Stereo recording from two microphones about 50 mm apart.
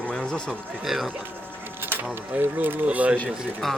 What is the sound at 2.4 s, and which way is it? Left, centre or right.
Speech, right.